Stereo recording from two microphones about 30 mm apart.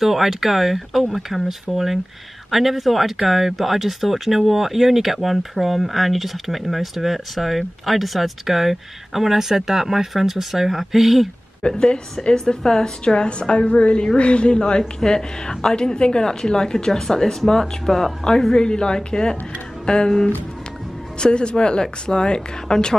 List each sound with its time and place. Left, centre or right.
0.0 s speech: centre
11.6 s a woman's voice: left
15.0 s a woman's voice: left